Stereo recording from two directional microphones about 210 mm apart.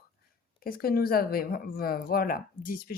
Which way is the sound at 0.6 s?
45° left (ahead or behind).